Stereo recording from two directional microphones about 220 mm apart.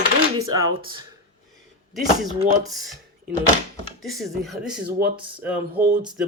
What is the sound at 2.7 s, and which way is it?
Speech, centre (ahead or behind).